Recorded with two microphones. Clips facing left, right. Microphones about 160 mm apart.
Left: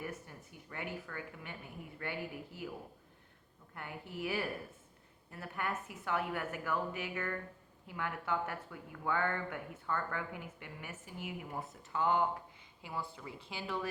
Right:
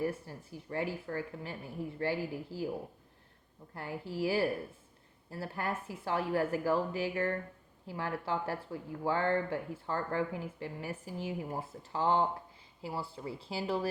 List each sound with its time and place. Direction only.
0.0 s speech: 30° right (ahead or behind)
4.1 s speech: 30° right (ahead or behind)